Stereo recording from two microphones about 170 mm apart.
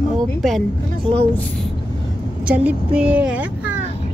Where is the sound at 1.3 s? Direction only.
10° left (ahead or behind).